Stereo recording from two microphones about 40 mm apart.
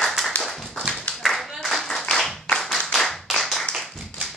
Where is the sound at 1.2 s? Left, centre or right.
Centre.